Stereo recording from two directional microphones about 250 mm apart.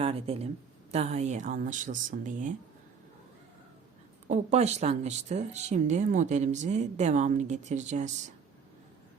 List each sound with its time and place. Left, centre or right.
0.0 s speech: right
4.3 s speech: right